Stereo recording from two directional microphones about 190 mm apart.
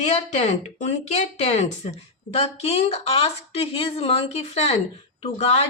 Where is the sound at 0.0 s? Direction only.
35° left (ahead or behind).